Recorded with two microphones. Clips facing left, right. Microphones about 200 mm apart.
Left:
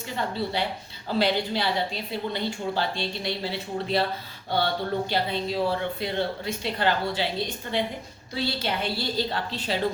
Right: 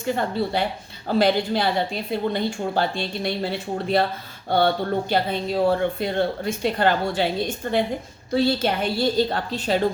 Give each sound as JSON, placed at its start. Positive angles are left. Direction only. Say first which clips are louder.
{"t": 0.0, "sound": "speech", "louder": "right 6 dB", "side_deg": -50}
{"t": 4.4, "sound": "speech", "louder": "right 6 dB", "side_deg": -50}